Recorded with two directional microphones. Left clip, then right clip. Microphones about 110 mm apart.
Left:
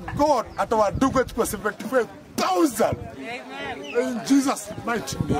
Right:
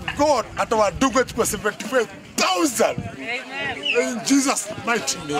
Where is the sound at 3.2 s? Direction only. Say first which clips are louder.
Right 9 dB; 20° left (ahead or behind).